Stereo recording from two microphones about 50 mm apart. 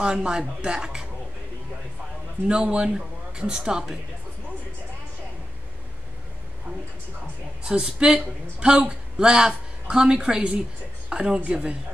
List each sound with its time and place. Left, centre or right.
0.0 s a woman's voice: centre
2.4 s a woman's voice: centre
7.6 s a woman's voice: centre